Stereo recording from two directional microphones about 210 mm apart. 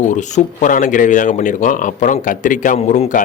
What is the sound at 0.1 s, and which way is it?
Speech, 35° left (ahead or behind).